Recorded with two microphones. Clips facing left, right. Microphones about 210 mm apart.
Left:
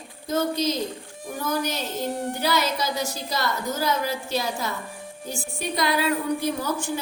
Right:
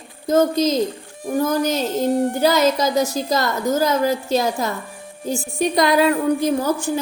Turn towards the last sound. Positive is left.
turn(degrees=-45)  # may be behind; listen again after turning